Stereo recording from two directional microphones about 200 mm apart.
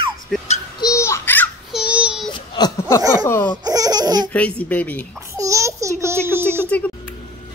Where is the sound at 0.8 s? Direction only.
15° left (ahead or behind).